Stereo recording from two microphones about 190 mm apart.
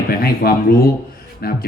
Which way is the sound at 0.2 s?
50° left (ahead or behind).